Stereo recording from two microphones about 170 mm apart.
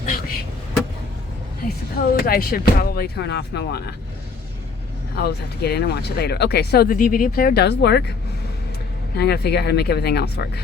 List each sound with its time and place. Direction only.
0.0 s vehicle: 55° left (ahead or behind)
2.1 s speech: 60° left (ahead or behind); by 3.8 s 85° left
5.2 s speech: 70° left (ahead or behind)
9.1 s speech: 70° left (ahead or behind)